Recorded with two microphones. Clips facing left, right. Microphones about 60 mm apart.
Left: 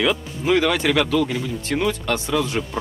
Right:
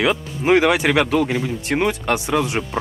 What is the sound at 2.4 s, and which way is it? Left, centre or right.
Speech, centre.